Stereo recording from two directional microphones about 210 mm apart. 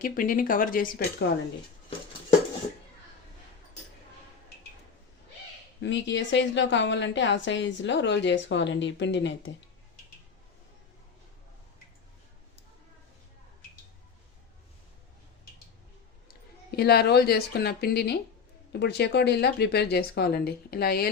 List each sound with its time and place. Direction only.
0.0 s speech: 40° left (ahead or behind)
5.8 s speech: 60° left (ahead or behind)
16.3 s a woman's voice: 50° left (ahead or behind)